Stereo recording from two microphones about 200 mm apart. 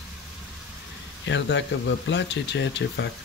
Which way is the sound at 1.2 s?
65° left (ahead or behind).